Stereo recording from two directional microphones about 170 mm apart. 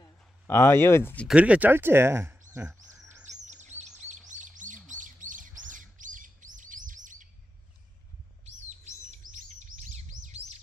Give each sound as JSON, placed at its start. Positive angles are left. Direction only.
{"t": 0.0, "sound": "speech", "side_deg": 15}
{"t": 1.2, "sound": "speech", "side_deg": -5}
{"t": 2.5, "sound": "bird", "side_deg": -15}
{"t": 3.3, "sound": "chirp", "side_deg": -45}
{"t": 9.1, "sound": "chirp", "side_deg": -50}